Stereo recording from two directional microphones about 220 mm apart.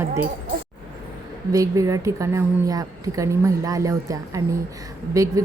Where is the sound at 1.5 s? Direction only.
15° right (ahead or behind).